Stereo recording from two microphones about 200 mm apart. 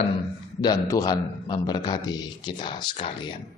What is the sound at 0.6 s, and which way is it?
A man's voice, 20° left (ahead or behind).